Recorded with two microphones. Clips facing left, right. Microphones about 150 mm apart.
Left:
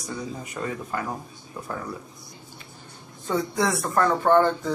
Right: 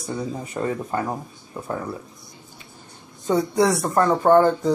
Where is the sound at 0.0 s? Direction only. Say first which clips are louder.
Right 5 dB; 30° right (ahead or behind).